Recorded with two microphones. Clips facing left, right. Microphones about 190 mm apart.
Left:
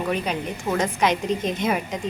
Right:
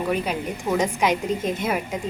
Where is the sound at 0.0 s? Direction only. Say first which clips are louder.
Right 1 dB; 5° right (ahead or behind).